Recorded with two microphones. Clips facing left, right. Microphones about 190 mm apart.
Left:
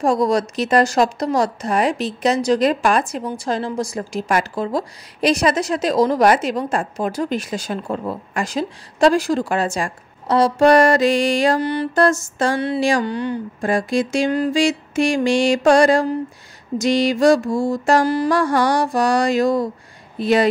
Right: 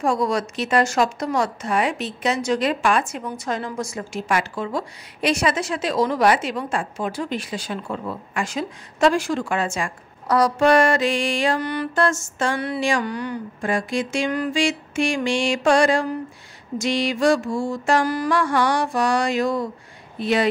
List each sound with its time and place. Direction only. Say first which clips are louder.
0.0 s a woman's voice: left 4 dB; 35° left (ahead or behind)